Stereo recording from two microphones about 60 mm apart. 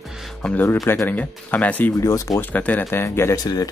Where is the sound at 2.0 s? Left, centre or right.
Left.